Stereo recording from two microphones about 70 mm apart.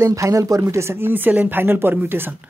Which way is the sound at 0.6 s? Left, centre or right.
Right.